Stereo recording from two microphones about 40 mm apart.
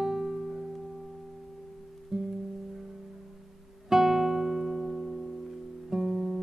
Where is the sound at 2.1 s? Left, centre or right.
Centre.